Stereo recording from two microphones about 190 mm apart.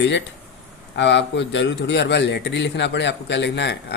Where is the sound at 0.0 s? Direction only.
70° left (ahead or behind).